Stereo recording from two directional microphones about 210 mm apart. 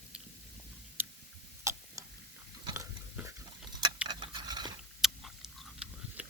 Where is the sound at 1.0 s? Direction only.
10° right (ahead or behind).